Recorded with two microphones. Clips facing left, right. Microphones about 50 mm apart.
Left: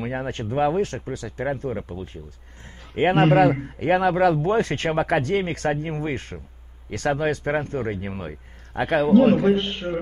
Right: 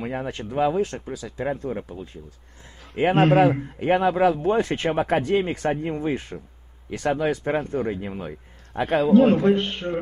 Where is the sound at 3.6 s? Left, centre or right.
Left.